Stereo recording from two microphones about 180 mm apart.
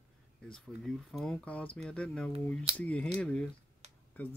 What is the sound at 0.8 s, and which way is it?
Speech, 5° left (ahead or behind).